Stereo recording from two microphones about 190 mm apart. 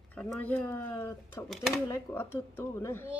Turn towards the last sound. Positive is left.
turn(degrees=10)  # may be behind; listen again after turning